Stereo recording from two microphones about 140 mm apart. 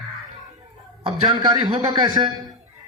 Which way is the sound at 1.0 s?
35° right (ahead or behind).